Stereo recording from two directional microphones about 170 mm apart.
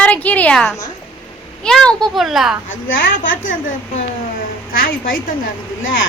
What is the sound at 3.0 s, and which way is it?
Speech, 55° left (ahead or behind).